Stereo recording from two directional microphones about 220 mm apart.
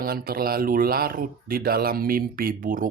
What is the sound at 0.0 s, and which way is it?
Speech, 45° right (ahead or behind).